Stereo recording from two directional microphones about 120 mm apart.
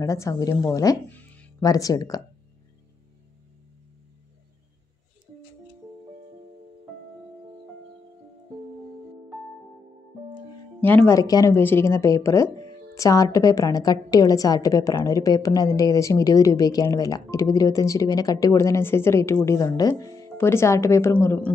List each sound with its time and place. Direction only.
0.0 s speech: 25° left (ahead or behind)
1.0 s music: 15° left (ahead or behind)
1.6 s speech: 30° left (ahead or behind)
10.8 s speech: 15° left (ahead or behind)
11.1 s speech: 30° left (ahead or behind)